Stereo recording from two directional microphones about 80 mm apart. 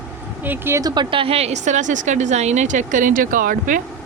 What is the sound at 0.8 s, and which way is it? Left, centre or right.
Speech, right.